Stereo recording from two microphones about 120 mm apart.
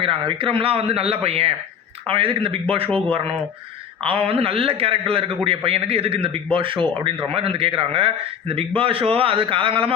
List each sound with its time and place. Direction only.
0.0 s a man's voice: 45° right (ahead or behind)